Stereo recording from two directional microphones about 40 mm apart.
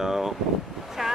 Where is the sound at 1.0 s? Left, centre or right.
Centre.